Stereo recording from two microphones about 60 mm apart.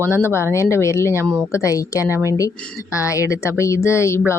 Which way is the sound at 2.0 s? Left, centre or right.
Right.